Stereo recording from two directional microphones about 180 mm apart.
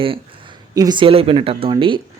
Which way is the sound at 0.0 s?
30° right (ahead or behind).